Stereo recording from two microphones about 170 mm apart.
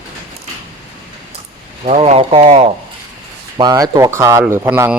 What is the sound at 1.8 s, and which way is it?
Speech, 40° right (ahead or behind).